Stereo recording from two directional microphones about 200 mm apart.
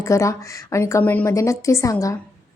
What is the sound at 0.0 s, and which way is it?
A woman's voice, 15° left (ahead or behind).